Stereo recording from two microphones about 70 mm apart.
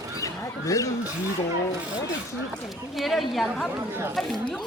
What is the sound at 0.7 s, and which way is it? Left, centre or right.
Speech, left.